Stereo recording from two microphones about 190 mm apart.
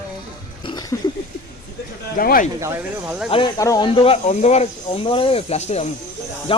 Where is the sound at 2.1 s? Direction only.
50° left (ahead or behind).